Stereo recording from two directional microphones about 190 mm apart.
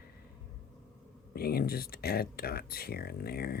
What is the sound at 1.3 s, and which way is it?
Speech, 55° left (ahead or behind).